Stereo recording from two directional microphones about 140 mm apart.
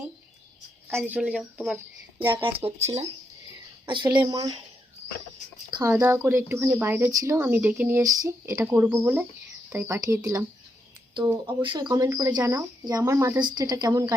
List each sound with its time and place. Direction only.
1.0 s speech: 10° right (ahead or behind)
2.3 s speech: 40° right (ahead or behind)
3.8 s speech: 35° right (ahead or behind)
5.8 s speech: 25° right (ahead or behind)
11.1 s speech: 35° right (ahead or behind)